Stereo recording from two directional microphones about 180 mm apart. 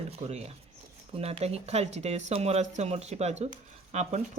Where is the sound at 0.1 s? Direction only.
35° right (ahead or behind).